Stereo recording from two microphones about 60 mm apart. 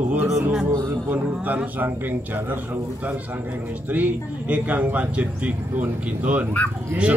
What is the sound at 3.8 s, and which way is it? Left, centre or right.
Speech, right.